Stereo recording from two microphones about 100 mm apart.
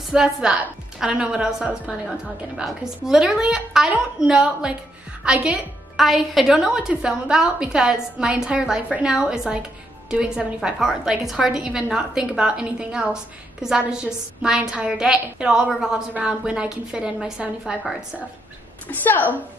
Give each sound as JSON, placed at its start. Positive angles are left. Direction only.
{"t": 0.1, "sound": "a woman's voice", "side_deg": -5}
{"t": 18.9, "sound": "a woman's voice", "side_deg": 15}